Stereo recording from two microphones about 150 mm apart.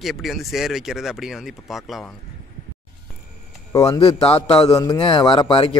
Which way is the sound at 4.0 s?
40° left (ahead or behind).